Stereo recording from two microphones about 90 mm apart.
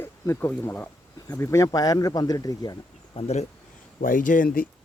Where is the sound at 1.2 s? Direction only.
35° left (ahead or behind).